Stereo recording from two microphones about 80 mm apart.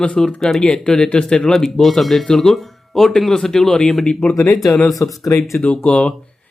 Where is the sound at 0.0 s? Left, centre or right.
Centre.